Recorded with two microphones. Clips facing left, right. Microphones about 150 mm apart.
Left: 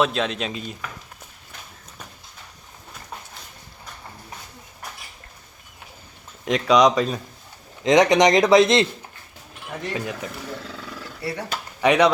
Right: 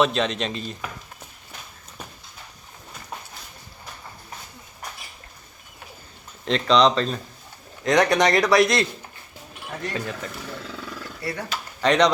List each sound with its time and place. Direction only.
0.0 s speech: centre (ahead or behind)
6.4 s speech: 10° left (ahead or behind)
9.9 s speech: 10° left (ahead or behind)